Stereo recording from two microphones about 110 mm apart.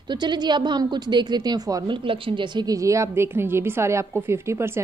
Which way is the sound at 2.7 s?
30° right (ahead or behind).